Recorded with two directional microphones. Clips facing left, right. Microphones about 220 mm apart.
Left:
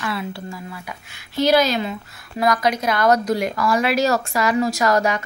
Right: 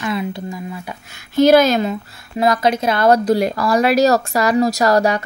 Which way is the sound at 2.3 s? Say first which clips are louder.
Right 3 dB; 25° right (ahead or behind).